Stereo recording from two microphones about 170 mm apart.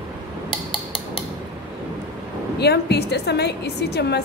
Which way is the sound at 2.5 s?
75° left (ahead or behind).